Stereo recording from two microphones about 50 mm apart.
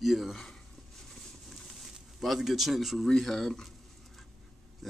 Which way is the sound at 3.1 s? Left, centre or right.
Centre.